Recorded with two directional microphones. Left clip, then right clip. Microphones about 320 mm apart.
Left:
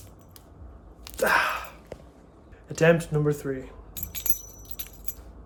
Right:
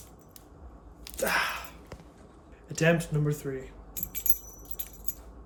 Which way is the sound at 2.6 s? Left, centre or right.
Centre.